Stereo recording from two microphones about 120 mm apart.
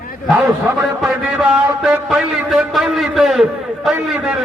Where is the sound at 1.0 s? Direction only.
5° right (ahead or behind).